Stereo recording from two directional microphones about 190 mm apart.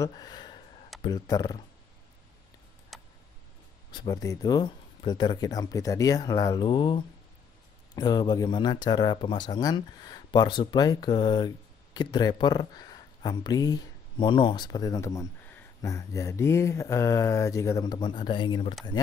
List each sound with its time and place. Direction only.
0.0 s a sound: 20° left (ahead or behind)
1.0 s speech: 20° left (ahead or behind)
2.9 s tick: centre (ahead or behind)
3.9 s speech: 20° left (ahead or behind)